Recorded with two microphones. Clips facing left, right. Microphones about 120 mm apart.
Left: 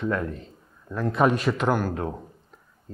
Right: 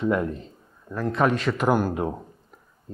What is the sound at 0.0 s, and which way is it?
Speech, 15° right (ahead or behind).